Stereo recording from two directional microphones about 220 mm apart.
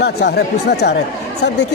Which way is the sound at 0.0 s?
50° left (ahead or behind).